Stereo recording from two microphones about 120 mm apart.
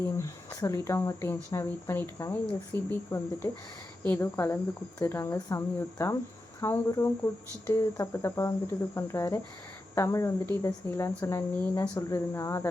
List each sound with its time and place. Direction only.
0.0 s speech: 25° left (ahead or behind)